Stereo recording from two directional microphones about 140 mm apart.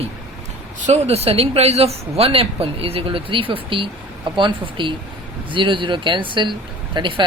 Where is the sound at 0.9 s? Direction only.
50° right (ahead or behind).